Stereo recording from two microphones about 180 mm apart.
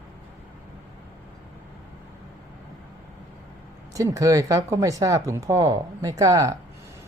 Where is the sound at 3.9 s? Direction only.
20° right (ahead or behind).